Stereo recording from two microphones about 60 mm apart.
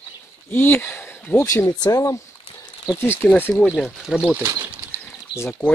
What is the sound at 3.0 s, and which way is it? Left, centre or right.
Speech, left.